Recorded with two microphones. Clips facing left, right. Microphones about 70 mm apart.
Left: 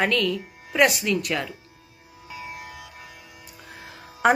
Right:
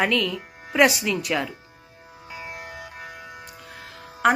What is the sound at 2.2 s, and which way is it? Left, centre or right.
Music, right.